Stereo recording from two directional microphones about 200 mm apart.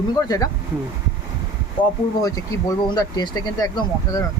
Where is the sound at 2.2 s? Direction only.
20° left (ahead or behind).